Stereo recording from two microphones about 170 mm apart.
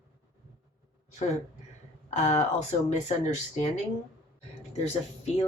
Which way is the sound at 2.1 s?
45° left (ahead or behind).